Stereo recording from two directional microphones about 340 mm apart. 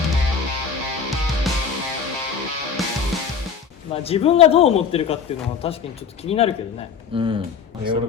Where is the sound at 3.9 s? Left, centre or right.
Centre.